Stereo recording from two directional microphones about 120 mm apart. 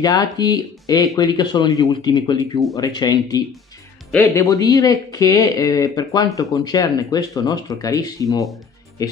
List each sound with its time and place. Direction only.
0.0 s speech: 35° left (ahead or behind)